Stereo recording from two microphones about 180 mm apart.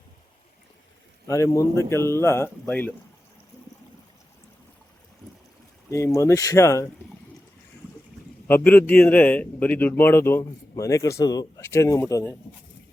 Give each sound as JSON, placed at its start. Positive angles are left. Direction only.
{"t": 1.3, "sound": "a man's voice", "side_deg": 15}
{"t": 5.9, "sound": "a man's voice", "side_deg": 15}
{"t": 8.4, "sound": "a man's voice", "side_deg": 10}